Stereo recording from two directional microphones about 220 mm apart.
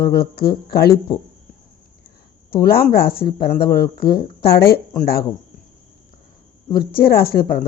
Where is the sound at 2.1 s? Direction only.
45° left (ahead or behind).